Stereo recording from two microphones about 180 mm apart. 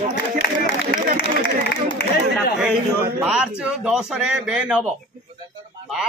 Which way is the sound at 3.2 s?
5° right (ahead or behind).